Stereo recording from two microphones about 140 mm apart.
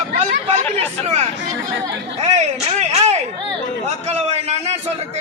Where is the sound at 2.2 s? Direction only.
55° right (ahead or behind).